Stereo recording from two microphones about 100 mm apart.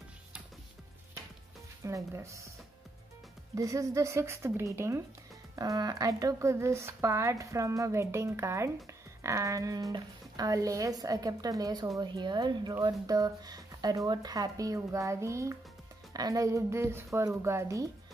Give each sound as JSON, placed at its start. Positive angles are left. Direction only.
{"t": 1.9, "sound": "speech", "side_deg": -30}
{"t": 3.5, "sound": "speech", "side_deg": -35}
{"t": 5.6, "sound": "speech", "side_deg": -40}
{"t": 12.0, "sound": "speech", "side_deg": -50}